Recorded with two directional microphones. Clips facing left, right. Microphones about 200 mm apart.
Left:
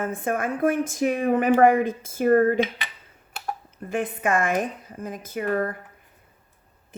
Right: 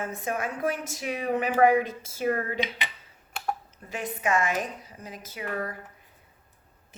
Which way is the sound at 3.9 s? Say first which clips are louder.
Left 4 dB; 55° left (ahead or behind).